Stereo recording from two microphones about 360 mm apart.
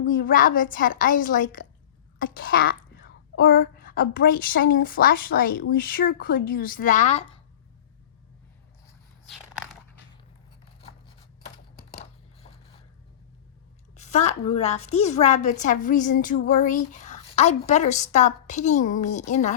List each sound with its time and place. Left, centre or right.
0.0 s a woman's voice: left
13.9 s a woman's voice: centre